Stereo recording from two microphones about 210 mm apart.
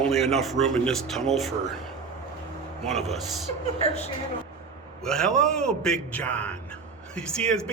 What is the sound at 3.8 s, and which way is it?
Speech, 30° left (ahead or behind).